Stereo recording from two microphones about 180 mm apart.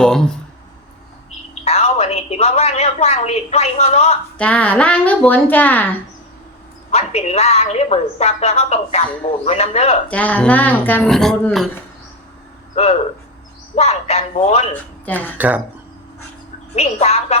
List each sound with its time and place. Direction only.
0.0 s a sound: 5° left (ahead or behind)
1.6 s a woman's voice: 35° left (ahead or behind)
4.4 s speech: 5° left (ahead or behind)
6.9 s a woman's voice: 35° left (ahead or behind)
10.1 s speech: 10° left (ahead or behind)
12.8 s a woman's voice: 35° left (ahead or behind)
14.7 s speech: 10° left (ahead or behind)
15.4 s speech: 10° right (ahead or behind)
16.7 s a woman's voice: 35° left (ahead or behind)